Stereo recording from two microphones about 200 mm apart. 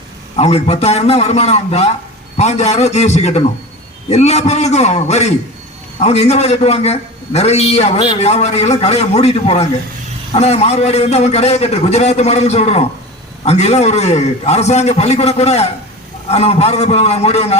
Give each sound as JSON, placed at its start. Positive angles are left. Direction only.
{"t": 0.3, "sound": "a man's voice", "side_deg": 30}